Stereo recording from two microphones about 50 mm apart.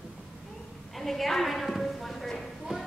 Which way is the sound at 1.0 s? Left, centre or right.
Centre.